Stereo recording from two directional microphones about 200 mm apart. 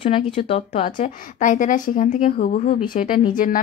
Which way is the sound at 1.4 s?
40° left (ahead or behind).